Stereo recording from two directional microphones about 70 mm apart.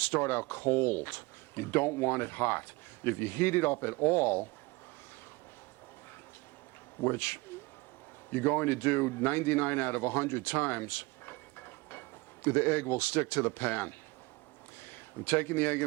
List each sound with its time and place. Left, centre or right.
0.0 s speech: left
7.0 s speech: left